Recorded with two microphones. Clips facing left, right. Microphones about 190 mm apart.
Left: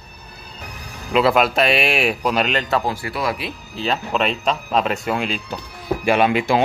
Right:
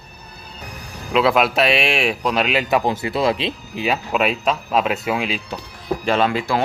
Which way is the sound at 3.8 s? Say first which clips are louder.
Right 1 dB; 5° right (ahead or behind).